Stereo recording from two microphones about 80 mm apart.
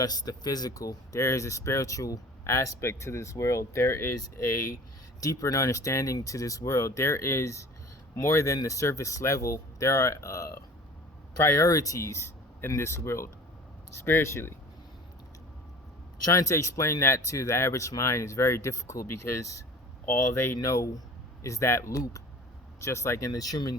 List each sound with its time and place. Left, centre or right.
0.0 s speech: left
16.2 s speech: left